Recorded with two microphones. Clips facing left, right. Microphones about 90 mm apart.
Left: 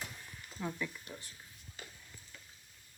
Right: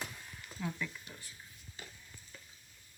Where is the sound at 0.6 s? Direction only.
10° left (ahead or behind).